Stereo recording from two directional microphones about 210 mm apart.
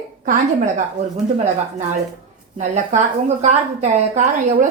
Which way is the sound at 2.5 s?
35° right (ahead or behind).